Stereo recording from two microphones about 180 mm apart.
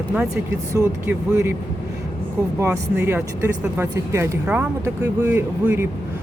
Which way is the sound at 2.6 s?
10° right (ahead or behind).